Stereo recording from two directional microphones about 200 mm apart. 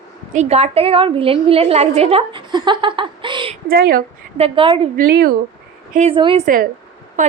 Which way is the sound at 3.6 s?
50° right (ahead or behind).